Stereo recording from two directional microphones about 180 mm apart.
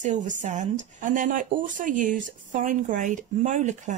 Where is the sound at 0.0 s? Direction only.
45° right (ahead or behind).